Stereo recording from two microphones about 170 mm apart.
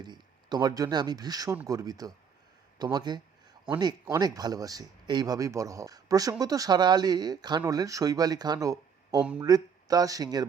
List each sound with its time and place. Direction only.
0.0 s speech: 25° right (ahead or behind)